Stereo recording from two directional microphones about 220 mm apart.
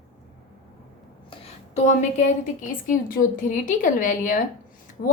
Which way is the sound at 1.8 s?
35° left (ahead or behind).